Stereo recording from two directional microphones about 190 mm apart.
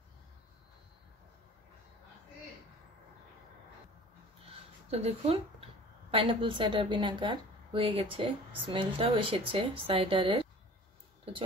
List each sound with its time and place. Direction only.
4.9 s a woman's voice: 30° right (ahead or behind)